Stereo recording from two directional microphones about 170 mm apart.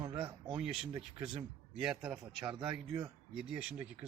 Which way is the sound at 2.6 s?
30° right (ahead or behind).